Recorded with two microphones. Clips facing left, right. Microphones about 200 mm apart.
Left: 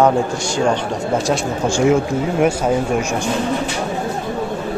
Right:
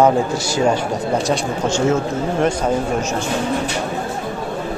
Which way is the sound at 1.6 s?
10° left (ahead or behind).